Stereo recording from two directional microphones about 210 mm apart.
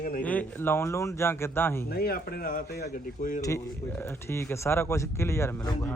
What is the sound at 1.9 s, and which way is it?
Speech, 45° left (ahead or behind).